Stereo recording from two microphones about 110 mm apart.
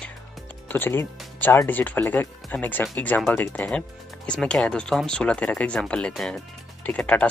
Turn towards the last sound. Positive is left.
turn(degrees=10)  # may be behind; listen again after turning